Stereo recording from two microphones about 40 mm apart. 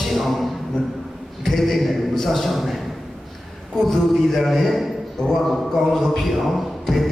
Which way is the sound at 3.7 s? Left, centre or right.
Centre.